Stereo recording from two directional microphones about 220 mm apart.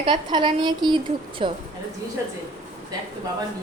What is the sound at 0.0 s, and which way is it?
A woman's voice, 20° right (ahead or behind).